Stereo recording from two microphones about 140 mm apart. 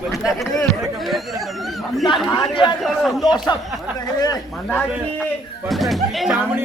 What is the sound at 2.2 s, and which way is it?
Speech, 30° left (ahead or behind).